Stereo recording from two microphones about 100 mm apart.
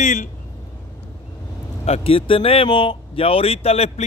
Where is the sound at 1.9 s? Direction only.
70° left (ahead or behind); by 4.0 s 90° left.